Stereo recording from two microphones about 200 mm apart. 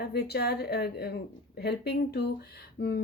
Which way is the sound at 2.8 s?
55° left (ahead or behind).